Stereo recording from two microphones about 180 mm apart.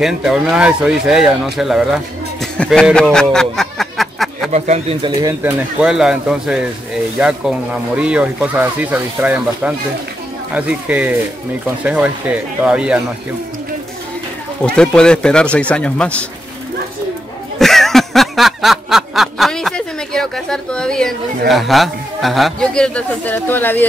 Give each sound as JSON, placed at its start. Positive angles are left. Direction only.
{"t": 0.0, "sound": "speech", "side_deg": 0}
{"t": 2.5, "sound": "a sound", "side_deg": 5}
{"t": 4.5, "sound": "speech", "side_deg": -40}
{"t": 5.2, "sound": "speech", "side_deg": -10}
{"t": 14.8, "sound": "speech", "side_deg": 5}
{"t": 17.6, "sound": "a sound", "side_deg": 0}